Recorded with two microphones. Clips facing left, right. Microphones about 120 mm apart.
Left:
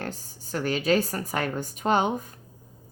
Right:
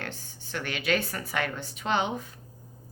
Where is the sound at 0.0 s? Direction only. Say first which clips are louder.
Left 4 dB; 40° left (ahead or behind).